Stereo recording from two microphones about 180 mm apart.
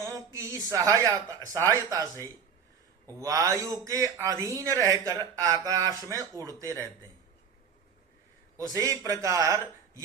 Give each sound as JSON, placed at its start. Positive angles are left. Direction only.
{"t": 0.0, "sound": "speech", "side_deg": -20}
{"t": 8.7, "sound": "speech", "side_deg": -20}